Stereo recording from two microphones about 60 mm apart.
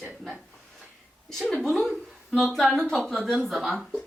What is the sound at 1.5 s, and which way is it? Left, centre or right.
A woman's voice, centre.